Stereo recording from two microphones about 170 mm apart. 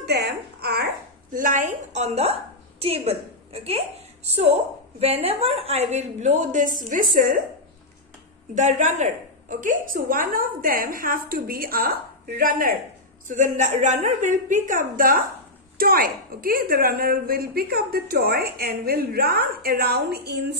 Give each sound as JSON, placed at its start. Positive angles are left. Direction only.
{"t": 0.0, "sound": "a sound", "side_deg": -75}
{"t": 1.3, "sound": "a woman's voice", "side_deg": -50}
{"t": 8.5, "sound": "a woman's voice", "side_deg": -45}
{"t": 13.4, "sound": "a woman's voice", "side_deg": -45}